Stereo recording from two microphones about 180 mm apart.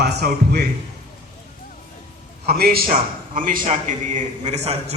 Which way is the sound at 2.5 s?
60° right (ahead or behind).